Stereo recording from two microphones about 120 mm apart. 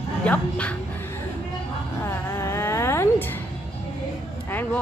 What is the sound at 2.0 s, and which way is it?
Cat, 25° left (ahead or behind).